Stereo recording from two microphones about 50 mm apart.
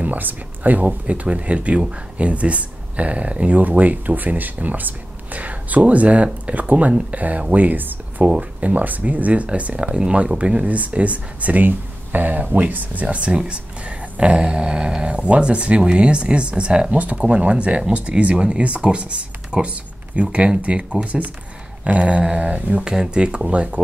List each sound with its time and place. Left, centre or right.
0.0 s speech: right
22.8 s speech: centre